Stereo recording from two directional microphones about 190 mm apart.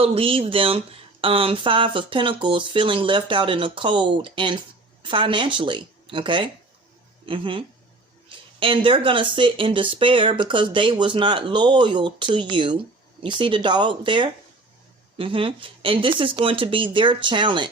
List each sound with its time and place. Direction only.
0.0 s speech: 30° right (ahead or behind)